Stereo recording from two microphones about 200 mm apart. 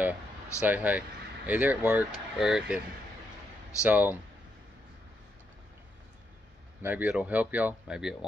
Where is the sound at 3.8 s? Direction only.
5° right (ahead or behind).